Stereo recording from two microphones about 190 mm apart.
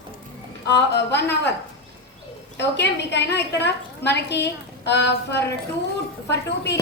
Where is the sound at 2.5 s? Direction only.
65° left (ahead or behind).